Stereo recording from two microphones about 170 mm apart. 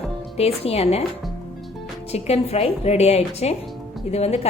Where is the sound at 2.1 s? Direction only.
40° left (ahead or behind).